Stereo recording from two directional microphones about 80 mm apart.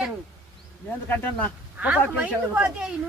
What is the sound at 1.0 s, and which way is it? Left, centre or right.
Speech, left.